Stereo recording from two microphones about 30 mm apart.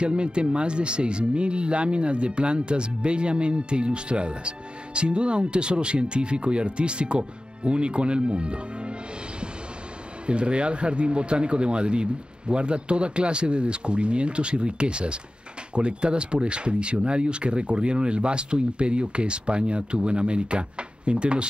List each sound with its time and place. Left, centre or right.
0.0 s speech: right
10.2 s speech: right